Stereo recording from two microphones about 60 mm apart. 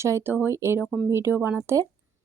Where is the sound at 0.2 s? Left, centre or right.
Right.